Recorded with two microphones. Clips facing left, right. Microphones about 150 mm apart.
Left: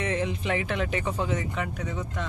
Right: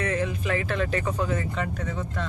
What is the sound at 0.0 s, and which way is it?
Speech, 25° left (ahead or behind).